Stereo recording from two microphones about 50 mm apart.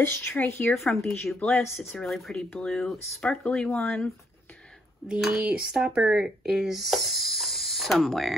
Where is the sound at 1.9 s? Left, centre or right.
Centre.